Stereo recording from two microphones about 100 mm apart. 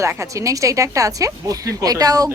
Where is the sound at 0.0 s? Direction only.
30° right (ahead or behind).